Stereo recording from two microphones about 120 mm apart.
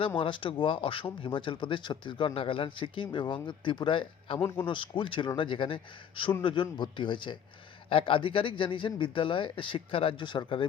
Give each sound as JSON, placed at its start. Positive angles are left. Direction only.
{"t": 0.2, "sound": "a man's voice", "side_deg": 45}